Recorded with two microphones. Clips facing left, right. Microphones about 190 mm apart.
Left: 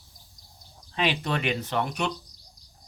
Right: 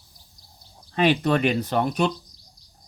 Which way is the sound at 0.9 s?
50° right (ahead or behind).